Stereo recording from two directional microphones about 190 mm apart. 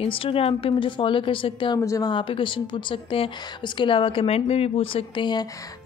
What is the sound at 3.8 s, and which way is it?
A woman's voice, 25° left (ahead or behind).